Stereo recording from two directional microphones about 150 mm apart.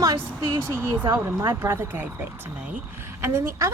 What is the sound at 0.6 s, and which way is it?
Speech, 15° right (ahead or behind).